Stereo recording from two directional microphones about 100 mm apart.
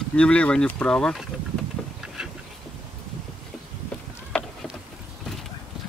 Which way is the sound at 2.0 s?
5° right (ahead or behind).